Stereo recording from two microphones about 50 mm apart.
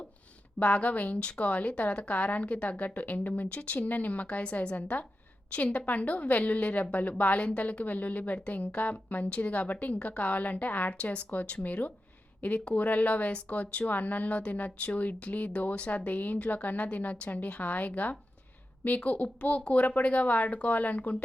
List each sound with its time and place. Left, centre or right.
0.6 s speech: left